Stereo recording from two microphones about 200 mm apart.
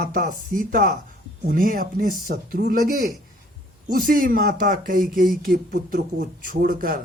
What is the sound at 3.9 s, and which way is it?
Speech, 45° right (ahead or behind).